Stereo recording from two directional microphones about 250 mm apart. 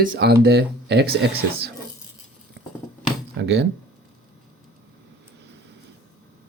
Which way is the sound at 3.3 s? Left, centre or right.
Right.